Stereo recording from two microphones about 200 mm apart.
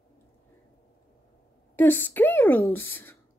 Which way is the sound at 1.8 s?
10° left (ahead or behind).